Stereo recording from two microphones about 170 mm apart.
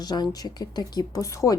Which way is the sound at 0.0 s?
25° left (ahead or behind).